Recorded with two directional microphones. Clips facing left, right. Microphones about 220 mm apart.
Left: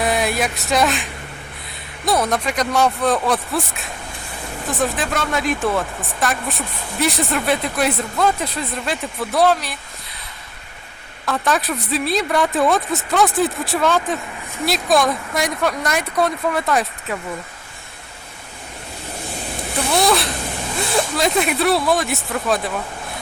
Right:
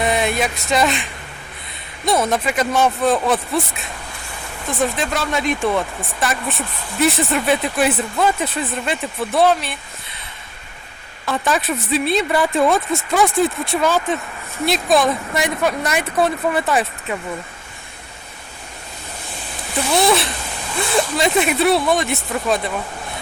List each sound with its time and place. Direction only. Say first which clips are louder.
0.0 s a sound: right 1 dB; centre (ahead or behind)
2.0 s speech: right 1 dB; centre (ahead or behind)
11.3 s speech: even; centre (ahead or behind)
19.9 s speech: right 1 dB; centre (ahead or behind)